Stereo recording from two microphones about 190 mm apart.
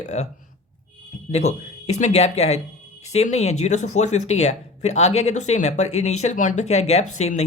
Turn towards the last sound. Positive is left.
turn(degrees=35)  # may be behind; listen again after turning